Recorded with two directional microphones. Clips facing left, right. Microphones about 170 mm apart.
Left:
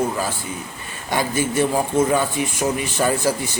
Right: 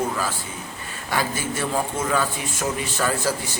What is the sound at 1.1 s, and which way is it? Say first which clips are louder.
A man's voice: left 5 dB; 20° left (ahead or behind).